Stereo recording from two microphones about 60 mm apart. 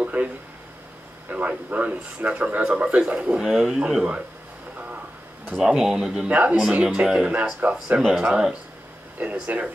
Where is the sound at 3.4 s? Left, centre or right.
Centre.